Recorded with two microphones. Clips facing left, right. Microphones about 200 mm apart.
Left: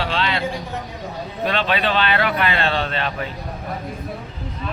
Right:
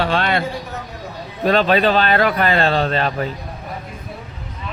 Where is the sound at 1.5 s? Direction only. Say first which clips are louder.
Right 7 dB; 40° right (ahead or behind).